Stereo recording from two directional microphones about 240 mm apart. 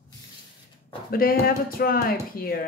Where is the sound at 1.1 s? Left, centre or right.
Left.